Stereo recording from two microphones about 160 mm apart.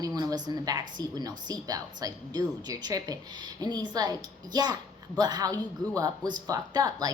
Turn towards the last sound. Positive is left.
turn(degrees=-25)  # may be behind; listen again after turning